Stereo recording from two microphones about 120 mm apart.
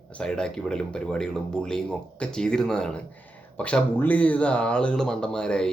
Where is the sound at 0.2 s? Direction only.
5° left (ahead or behind).